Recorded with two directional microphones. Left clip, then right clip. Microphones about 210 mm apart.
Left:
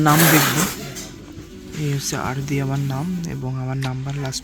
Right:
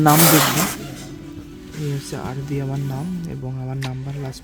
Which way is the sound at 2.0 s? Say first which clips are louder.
Left 5 dB; centre (ahead or behind).